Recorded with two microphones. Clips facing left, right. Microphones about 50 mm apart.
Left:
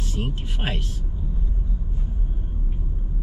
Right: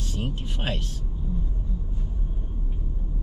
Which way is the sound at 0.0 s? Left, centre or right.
Centre.